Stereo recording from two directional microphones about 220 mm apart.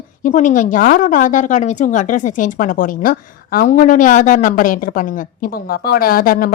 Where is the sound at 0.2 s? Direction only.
35° left (ahead or behind).